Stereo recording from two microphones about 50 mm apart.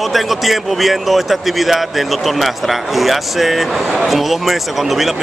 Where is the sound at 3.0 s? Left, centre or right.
Centre.